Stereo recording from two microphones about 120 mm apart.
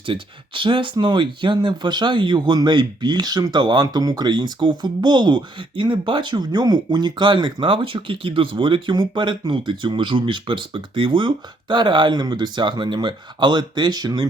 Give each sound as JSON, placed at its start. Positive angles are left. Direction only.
{"t": 0.0, "sound": "speech", "side_deg": -45}